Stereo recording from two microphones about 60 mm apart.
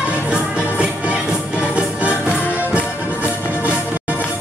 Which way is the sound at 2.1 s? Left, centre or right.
Left.